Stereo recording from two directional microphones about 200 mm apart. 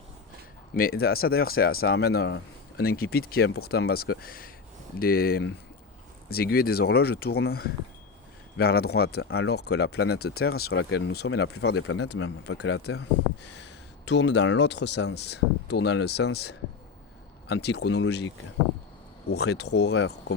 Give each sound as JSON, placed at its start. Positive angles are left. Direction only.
{"t": 0.8, "sound": "speech", "side_deg": 50}
{"t": 11.5, "sound": "speech", "side_deg": 70}
{"t": 19.3, "sound": "speech", "side_deg": 55}